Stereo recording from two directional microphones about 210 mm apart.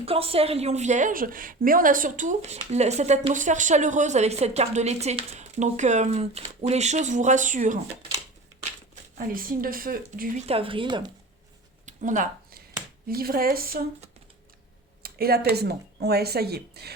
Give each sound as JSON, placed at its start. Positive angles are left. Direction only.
{"t": 0.0, "sound": "a woman's voice", "side_deg": -25}
{"t": 9.1, "sound": "speech", "side_deg": -40}
{"t": 10.4, "sound": "speech", "side_deg": -25}
{"t": 11.9, "sound": "a sound", "side_deg": -35}
{"t": 13.1, "sound": "speech", "side_deg": -45}
{"t": 15.0, "sound": "speech", "side_deg": -45}